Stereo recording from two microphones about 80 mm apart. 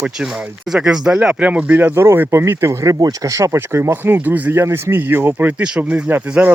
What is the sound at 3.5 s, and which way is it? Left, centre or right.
Speech, right.